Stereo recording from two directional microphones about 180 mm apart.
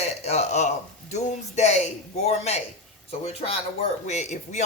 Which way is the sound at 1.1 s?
40° left (ahead or behind).